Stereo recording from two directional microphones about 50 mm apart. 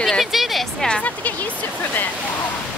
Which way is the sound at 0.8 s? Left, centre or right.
Centre.